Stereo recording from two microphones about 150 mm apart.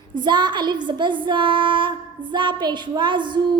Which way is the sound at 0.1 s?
30° right (ahead or behind).